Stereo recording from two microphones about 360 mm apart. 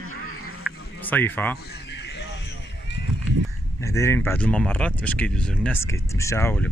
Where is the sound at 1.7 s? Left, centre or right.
Left.